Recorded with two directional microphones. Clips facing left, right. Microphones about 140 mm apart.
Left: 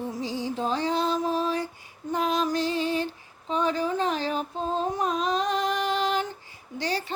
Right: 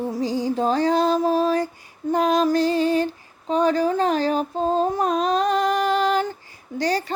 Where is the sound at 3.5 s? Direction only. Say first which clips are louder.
Right 6 dB; 40° right (ahead or behind).